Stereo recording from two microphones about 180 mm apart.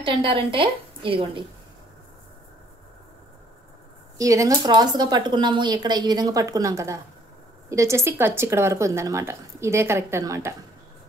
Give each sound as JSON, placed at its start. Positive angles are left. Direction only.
{"t": 0.0, "sound": "speech", "side_deg": -30}
{"t": 4.2, "sound": "a woman's voice", "side_deg": -20}